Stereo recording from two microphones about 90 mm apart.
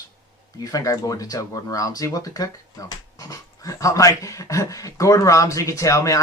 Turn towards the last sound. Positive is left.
turn(degrees=35)  # may be behind; listen again after turning